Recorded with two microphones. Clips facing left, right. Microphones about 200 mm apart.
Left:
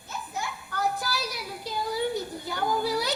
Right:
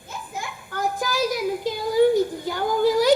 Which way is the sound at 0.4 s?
90° right.